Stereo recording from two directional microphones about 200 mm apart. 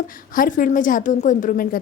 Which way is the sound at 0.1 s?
45° left (ahead or behind).